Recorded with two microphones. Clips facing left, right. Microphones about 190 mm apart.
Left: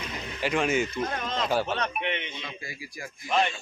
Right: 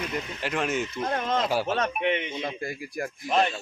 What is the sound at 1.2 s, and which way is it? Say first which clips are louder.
A man's voice: right 2 dB; 50° right (ahead or behind).